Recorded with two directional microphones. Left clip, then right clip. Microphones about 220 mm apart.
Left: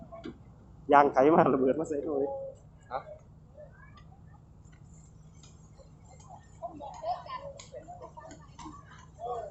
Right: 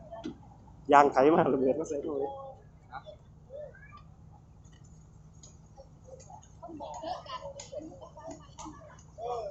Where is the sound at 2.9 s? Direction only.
50° left (ahead or behind).